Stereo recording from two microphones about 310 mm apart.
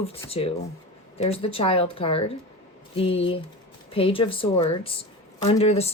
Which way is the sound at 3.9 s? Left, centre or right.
Centre.